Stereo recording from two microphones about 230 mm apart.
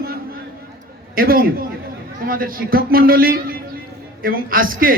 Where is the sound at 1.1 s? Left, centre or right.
Right.